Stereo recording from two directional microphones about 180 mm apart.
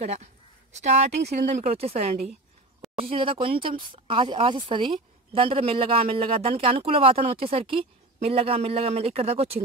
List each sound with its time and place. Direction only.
0.0 s speech: 35° right (ahead or behind)
1.3 s speech: 35° right (ahead or behind)